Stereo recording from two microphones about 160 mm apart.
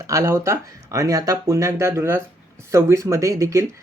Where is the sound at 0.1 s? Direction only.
20° right (ahead or behind).